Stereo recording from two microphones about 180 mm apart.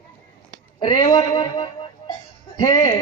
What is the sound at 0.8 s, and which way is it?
A man's voice, 20° left (ahead or behind).